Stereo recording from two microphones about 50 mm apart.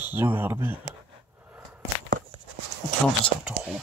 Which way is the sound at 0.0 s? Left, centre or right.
Right.